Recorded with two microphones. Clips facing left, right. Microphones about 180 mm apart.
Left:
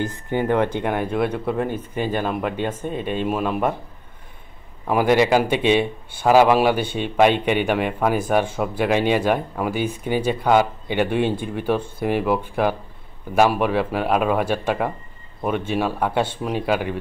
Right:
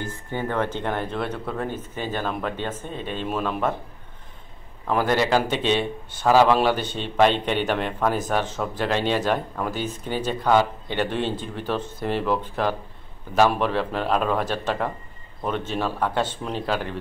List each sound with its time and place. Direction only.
0.0 s a man's voice: 15° left (ahead or behind)
4.8 s a man's voice: 10° left (ahead or behind)